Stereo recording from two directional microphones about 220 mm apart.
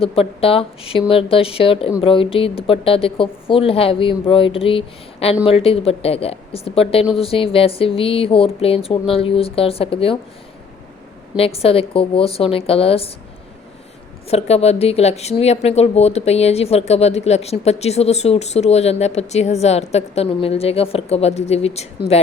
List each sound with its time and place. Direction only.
0.0 s speech: 25° left (ahead or behind)
11.3 s speech: 25° left (ahead or behind)
14.3 s speech: 30° left (ahead or behind)